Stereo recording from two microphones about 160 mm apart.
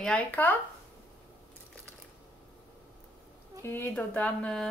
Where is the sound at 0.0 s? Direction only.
10° left (ahead or behind).